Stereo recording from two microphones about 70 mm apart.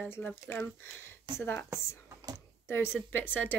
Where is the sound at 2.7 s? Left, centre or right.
Left.